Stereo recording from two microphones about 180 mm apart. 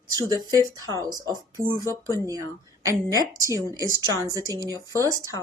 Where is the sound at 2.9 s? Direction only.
20° right (ahead or behind).